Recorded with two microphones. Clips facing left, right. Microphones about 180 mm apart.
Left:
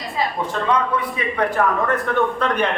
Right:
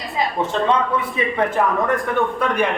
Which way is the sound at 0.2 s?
20° right (ahead or behind).